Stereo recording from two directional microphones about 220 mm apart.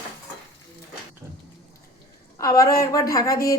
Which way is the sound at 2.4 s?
15° left (ahead or behind).